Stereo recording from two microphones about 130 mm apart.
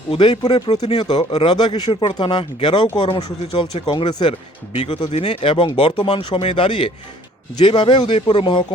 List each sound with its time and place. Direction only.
0.1 s speech: 40° left (ahead or behind)
3.5 s speech: 50° left (ahead or behind)